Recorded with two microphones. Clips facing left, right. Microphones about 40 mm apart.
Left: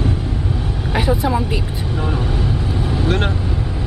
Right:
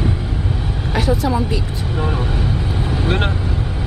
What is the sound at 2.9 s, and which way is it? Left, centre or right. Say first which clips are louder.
Vehicle: even; centre.